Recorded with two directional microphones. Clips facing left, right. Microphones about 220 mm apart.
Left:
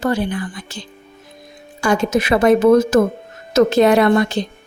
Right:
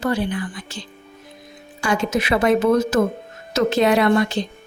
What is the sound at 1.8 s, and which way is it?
A woman's voice, 45° left (ahead or behind).